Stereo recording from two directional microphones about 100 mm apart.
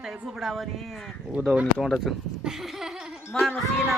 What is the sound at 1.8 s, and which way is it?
Speech, centre (ahead or behind).